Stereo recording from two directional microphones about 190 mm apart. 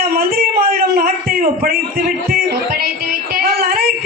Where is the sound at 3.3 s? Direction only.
55° right (ahead or behind).